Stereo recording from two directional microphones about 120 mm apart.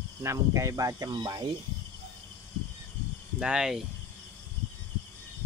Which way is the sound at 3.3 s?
5° right (ahead or behind).